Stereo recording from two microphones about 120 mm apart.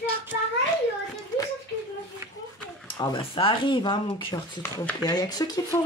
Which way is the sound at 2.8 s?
40° left (ahead or behind).